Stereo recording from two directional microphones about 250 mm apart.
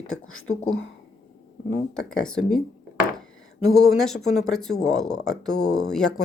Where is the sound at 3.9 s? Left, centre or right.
Centre.